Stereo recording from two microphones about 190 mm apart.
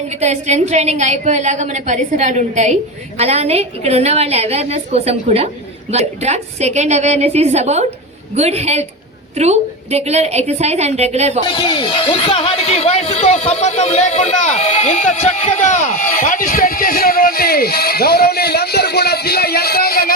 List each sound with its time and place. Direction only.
0.2 s a woman's voice: 35° right (ahead or behind)
11.4 s speech: 25° left (ahead or behind); by 20.1 s 50° left (ahead or behind)